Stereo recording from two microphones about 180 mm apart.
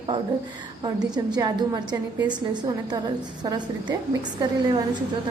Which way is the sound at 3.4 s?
25° right (ahead or behind).